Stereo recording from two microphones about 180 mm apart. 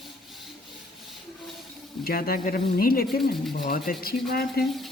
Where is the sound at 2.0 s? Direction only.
55° left (ahead or behind).